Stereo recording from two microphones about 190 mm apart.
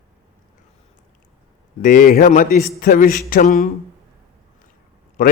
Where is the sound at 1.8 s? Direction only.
45° left (ahead or behind).